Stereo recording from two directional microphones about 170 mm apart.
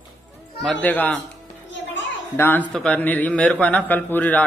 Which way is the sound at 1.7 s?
90° left.